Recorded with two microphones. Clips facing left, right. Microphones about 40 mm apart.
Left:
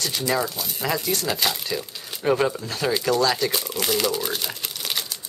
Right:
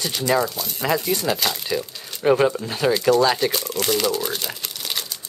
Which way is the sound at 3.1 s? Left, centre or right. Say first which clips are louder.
Right 3 dB; centre.